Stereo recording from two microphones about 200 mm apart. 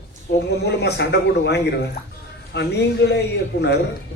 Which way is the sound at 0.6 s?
55° left (ahead or behind).